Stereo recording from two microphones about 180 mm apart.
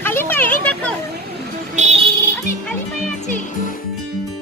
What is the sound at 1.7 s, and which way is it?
Music, 40° right (ahead or behind).